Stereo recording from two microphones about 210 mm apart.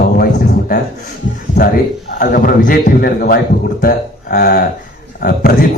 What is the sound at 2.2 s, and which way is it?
Speech, 40° left (ahead or behind).